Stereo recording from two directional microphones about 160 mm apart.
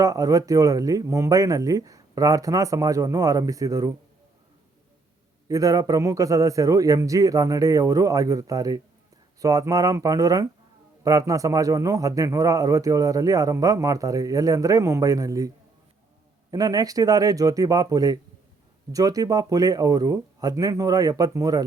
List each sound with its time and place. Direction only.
0.0 s a man's voice: 20° right (ahead or behind)
5.5 s a man's voice: 20° right (ahead or behind)